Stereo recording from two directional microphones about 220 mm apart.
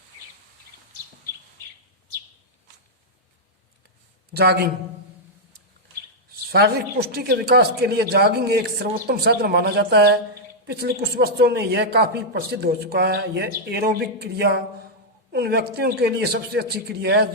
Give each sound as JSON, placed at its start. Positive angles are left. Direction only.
{"t": 4.4, "sound": "speech", "side_deg": -45}
{"t": 6.5, "sound": "speech", "side_deg": -45}